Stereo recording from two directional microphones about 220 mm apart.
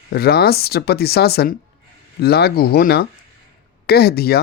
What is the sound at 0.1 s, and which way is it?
Speech, 45° left (ahead or behind).